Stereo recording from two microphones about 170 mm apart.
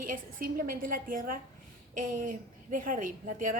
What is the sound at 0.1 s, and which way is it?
A woman's voice, 55° right (ahead or behind).